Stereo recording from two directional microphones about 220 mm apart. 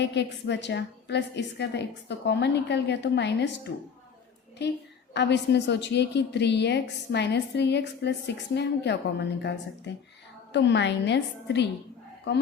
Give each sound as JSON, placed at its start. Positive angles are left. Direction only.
{"t": 0.0, "sound": "a woman's voice", "side_deg": 50}
{"t": 4.6, "sound": "a woman's voice", "side_deg": 50}